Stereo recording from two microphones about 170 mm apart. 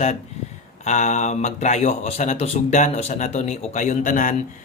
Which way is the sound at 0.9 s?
45° left (ahead or behind).